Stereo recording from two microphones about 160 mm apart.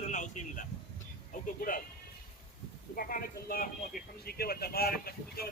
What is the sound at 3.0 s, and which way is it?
Speech, 65° left (ahead or behind).